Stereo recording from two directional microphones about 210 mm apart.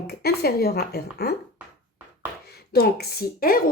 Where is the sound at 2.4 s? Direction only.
50° left (ahead or behind).